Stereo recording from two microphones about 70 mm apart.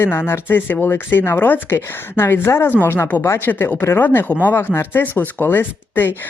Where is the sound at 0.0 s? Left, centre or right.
Left.